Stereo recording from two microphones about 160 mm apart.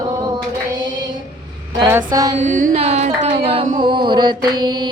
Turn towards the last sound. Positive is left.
turn(degrees=-25)  # may be behind; listen again after turning